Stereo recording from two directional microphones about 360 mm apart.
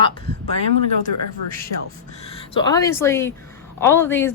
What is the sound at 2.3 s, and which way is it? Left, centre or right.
A woman's voice, centre.